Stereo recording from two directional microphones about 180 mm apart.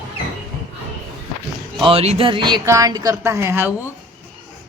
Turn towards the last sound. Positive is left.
turn(degrees=-15)  # may be behind; listen again after turning